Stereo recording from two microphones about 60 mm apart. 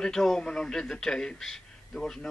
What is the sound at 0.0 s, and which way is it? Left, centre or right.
Speech, centre.